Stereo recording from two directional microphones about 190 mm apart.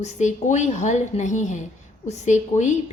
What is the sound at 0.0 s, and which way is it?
A woman's voice, 40° left (ahead or behind).